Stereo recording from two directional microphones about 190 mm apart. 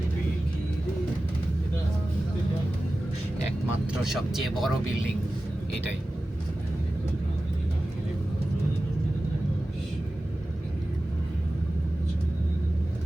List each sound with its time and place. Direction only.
3.7 s speech: centre (ahead or behind)